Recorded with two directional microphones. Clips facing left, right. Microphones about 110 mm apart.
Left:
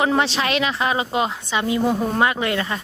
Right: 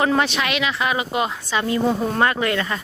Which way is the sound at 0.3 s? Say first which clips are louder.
Left 1 dB; 35° left (ahead or behind).